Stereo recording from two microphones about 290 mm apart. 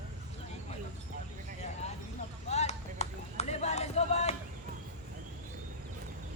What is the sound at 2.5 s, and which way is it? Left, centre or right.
Run, left.